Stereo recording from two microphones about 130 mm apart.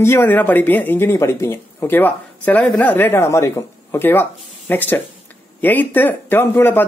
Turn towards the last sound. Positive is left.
turn(degrees=15)  # may be behind; listen again after turning